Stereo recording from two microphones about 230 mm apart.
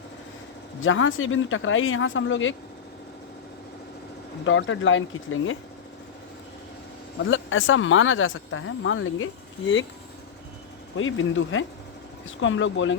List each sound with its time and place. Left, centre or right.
0.8 s speech: left
4.4 s speech: left
7.3 s speech: left
10.9 s speech: left